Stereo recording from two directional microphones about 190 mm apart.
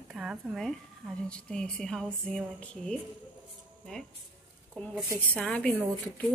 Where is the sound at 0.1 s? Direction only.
5° right (ahead or behind).